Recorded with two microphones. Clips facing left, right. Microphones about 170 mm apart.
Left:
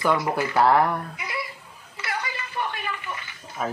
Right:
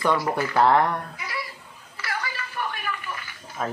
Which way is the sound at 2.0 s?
20° left (ahead or behind).